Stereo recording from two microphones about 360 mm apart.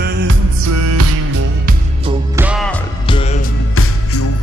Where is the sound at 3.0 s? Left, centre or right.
Centre.